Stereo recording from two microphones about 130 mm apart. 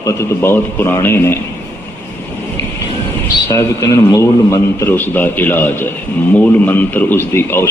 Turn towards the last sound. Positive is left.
turn(degrees=15)  # may be behind; listen again after turning